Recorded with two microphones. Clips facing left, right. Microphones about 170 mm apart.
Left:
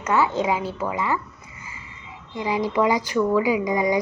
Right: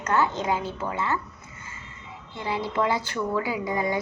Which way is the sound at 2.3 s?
15° left (ahead or behind).